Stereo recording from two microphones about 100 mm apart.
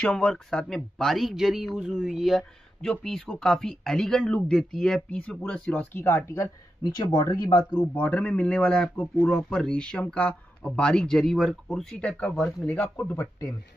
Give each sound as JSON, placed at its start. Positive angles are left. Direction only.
{"t": 0.0, "sound": "speech", "side_deg": 10}
{"t": 5.9, "sound": "speech", "side_deg": 25}
{"t": 6.8, "sound": "speech", "side_deg": 45}
{"t": 7.9, "sound": "speech", "side_deg": 20}
{"t": 12.6, "sound": "speech", "side_deg": 20}